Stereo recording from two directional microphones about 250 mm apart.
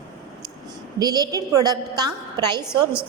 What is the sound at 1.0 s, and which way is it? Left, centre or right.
A woman's voice, centre.